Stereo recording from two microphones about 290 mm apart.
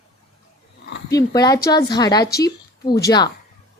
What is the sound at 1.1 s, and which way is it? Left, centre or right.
A woman's voice, centre.